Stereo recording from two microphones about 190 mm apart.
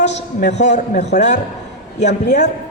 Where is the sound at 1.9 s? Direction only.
65° left (ahead or behind).